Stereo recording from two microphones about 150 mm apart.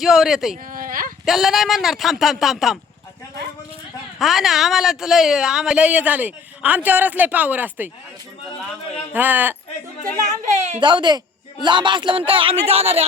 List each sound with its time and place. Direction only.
0.0 s speech: centre (ahead or behind)
0.7 s a sound: 65° right (ahead or behind)
1.2 s speech: centre (ahead or behind)
4.2 s speech: centre (ahead or behind)
9.1 s speech: 10° right (ahead or behind)
10.2 s speech: 50° right (ahead or behind)
10.8 s speech: 30° right (ahead or behind)